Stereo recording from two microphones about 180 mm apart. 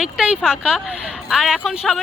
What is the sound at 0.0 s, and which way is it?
A woman's voice, 5° right (ahead or behind).